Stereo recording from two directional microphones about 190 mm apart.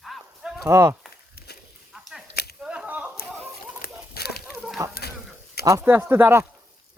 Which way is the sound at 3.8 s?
55° left (ahead or behind).